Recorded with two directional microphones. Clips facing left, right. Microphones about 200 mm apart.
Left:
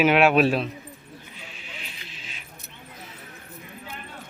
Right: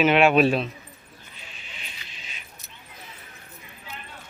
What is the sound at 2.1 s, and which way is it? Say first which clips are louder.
Keys jangling: left 2 dB; centre (ahead or behind).